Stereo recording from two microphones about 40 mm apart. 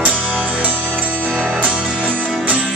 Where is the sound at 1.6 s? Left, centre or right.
Right.